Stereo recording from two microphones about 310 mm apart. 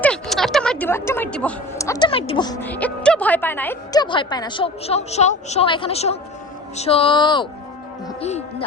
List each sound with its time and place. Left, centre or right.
0.0 s speech: centre